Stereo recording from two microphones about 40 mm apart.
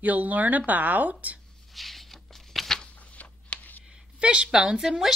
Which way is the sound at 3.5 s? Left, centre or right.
Left.